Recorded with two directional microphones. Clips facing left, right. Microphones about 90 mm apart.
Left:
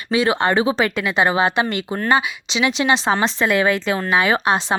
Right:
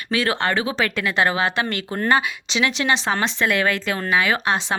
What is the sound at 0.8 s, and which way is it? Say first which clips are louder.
Speech: left 2 dB; 15° left (ahead or behind).